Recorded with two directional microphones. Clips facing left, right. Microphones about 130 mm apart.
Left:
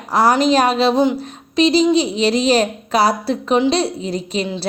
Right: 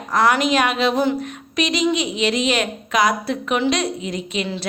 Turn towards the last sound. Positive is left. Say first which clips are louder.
# left 3 dB
turn(degrees=35)  # may be behind; listen again after turning